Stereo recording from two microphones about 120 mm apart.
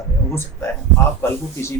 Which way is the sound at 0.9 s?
20° left (ahead or behind).